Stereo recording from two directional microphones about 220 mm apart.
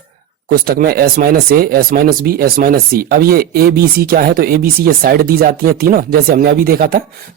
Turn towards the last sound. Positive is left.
turn(degrees=-40)  # may be behind; listen again after turning